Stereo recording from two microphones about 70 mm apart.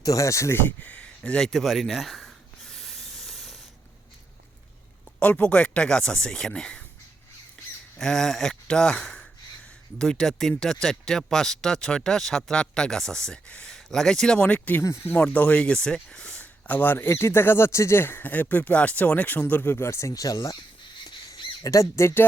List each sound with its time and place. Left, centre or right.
0.0 s speech: left
0.5 s a sound: left; by 3.6 s centre
5.2 s speech: centre
7.6 s crow: centre
7.9 s speech: centre
14.3 s speech: left
19.7 s speech: left